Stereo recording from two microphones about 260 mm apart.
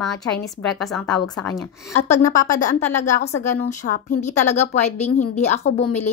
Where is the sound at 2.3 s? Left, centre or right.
Left.